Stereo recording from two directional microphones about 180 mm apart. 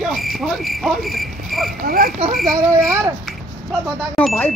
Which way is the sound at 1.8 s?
55° right (ahead or behind).